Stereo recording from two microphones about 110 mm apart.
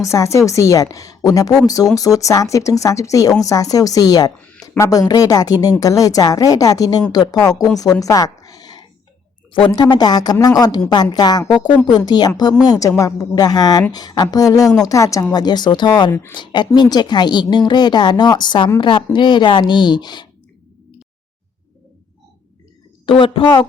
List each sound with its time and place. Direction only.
0.0 s a woman's voice: 30° left (ahead or behind)
9.5 s a woman's voice: 50° left (ahead or behind)
23.0 s speech: 55° left (ahead or behind)